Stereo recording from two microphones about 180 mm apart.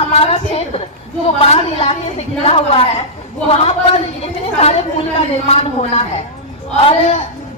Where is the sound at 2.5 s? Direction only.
35° left (ahead or behind).